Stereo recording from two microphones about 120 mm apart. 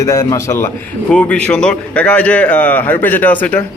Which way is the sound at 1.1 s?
10° left (ahead or behind).